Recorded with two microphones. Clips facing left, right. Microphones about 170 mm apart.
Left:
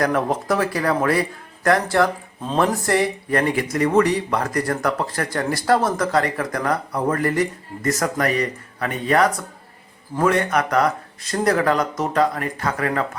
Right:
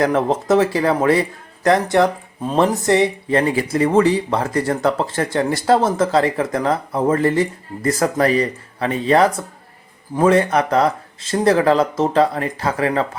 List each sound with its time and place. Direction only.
0.0 s speech: 25° right (ahead or behind)